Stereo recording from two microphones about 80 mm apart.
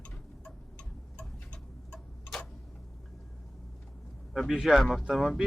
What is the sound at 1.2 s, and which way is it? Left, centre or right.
Tick-tock, centre.